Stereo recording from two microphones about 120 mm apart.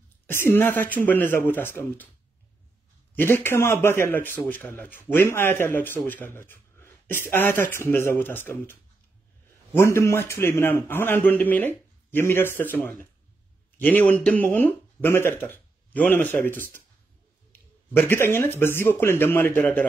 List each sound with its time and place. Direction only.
0.3 s a man's voice: 20° left (ahead or behind)
3.2 s a man's voice: 20° left (ahead or behind)
9.8 s a man's voice: 20° left (ahead or behind)